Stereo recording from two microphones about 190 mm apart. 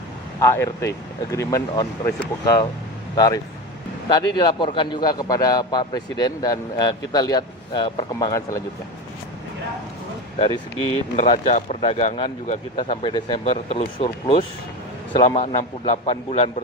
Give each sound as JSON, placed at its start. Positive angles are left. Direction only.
{"t": 0.3, "sound": "a man's voice", "side_deg": 15}
{"t": 10.3, "sound": "a man's voice", "side_deg": 30}